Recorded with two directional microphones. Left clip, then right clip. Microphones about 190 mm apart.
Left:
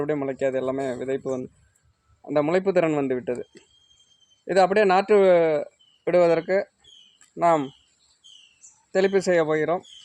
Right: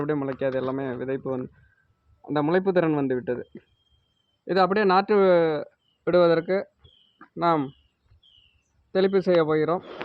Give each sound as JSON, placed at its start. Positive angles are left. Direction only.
{"t": 0.0, "sound": "a man's voice", "side_deg": -40}
{"t": 4.4, "sound": "a man's voice", "side_deg": -40}
{"t": 8.9, "sound": "a man's voice", "side_deg": -35}